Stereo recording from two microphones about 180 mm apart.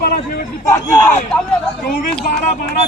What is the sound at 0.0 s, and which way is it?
Speech, 55° left (ahead or behind).